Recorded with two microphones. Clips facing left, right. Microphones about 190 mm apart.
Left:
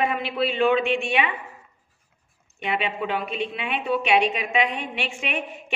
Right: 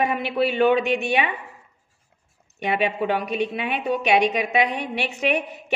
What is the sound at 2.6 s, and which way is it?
A woman's voice, 40° right (ahead or behind).